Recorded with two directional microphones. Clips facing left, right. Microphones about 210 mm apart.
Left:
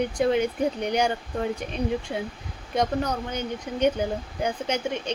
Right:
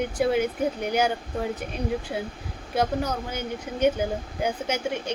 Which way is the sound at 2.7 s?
5° right (ahead or behind).